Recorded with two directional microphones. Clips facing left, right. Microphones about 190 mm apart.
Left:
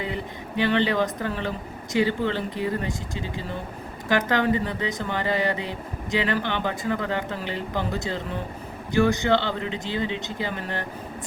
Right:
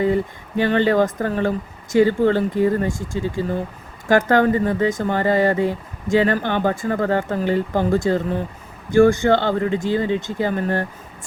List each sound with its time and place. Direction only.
0.0 s speech: 45° right (ahead or behind)